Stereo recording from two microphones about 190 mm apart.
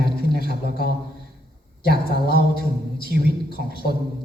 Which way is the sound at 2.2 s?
55° left (ahead or behind).